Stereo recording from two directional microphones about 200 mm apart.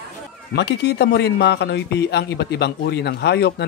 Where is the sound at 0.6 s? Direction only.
55° left (ahead or behind).